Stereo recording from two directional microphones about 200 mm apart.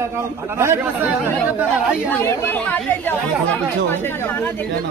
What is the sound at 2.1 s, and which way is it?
A man's voice, 10° left (ahead or behind).